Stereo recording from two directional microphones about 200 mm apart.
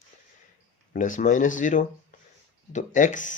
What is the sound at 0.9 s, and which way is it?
Speech, 40° left (ahead or behind).